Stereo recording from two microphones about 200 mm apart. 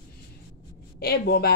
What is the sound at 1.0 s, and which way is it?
Speech, 50° left (ahead or behind).